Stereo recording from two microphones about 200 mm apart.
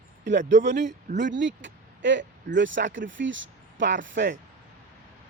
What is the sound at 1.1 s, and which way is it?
Speech, 65° right (ahead or behind).